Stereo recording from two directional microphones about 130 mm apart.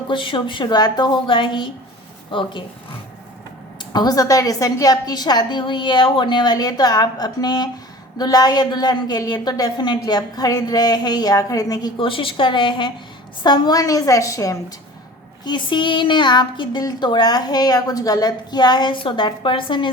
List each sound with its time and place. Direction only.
0.1 s speech: 40° left (ahead or behind)
3.9 s speech: 30° left (ahead or behind)
11.9 s a woman's voice: 40° left (ahead or behind); by 14.6 s 25° left (ahead or behind)
15.4 s speech: 35° left (ahead or behind)